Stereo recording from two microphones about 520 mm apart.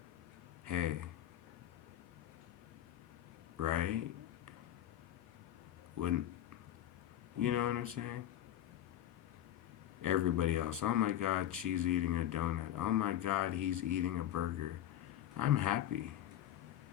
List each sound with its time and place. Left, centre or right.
0.6 s a sound: right
3.6 s a man's voice: right
7.3 s speech: right
10.0 s speech: right